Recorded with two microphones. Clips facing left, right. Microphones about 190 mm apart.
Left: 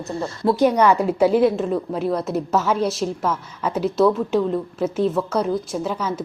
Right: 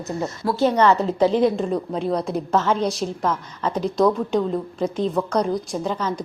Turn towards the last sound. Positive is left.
turn(degrees=10)  # may be behind; listen again after turning